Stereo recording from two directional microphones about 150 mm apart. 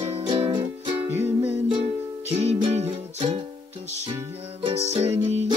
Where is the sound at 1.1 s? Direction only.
15° right (ahead or behind).